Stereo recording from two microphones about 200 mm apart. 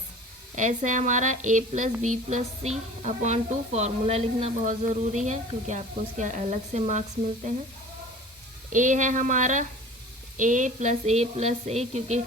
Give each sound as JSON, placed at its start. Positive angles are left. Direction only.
{"t": 0.5, "sound": "a woman's voice", "side_deg": -40}
{"t": 8.7, "sound": "a woman's voice", "side_deg": -40}